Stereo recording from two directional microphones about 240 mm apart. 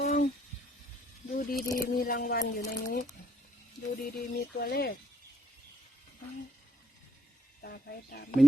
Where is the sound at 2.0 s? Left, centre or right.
Left.